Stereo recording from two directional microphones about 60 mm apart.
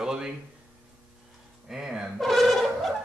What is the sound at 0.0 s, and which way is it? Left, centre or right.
Speech, centre.